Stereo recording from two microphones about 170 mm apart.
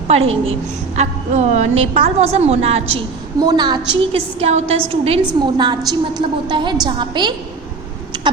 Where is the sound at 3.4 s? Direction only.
25° right (ahead or behind).